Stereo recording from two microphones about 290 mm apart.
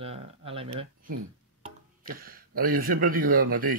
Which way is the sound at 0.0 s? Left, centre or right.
Centre.